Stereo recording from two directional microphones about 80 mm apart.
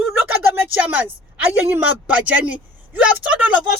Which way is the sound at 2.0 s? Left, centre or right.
Centre.